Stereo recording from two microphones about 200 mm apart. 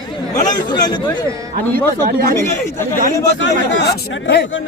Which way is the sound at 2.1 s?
50° right (ahead or behind).